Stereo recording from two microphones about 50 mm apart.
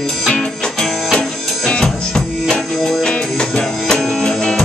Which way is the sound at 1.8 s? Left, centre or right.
Centre.